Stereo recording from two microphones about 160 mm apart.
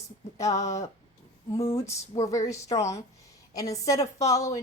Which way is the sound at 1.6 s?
20° left (ahead or behind).